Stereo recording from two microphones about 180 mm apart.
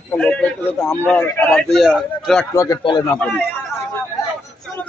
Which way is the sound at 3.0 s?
5° left (ahead or behind).